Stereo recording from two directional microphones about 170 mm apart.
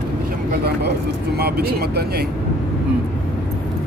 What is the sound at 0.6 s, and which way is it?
Speech, 75° right (ahead or behind).